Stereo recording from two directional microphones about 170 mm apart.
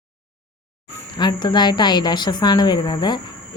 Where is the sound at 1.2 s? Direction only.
25° left (ahead or behind).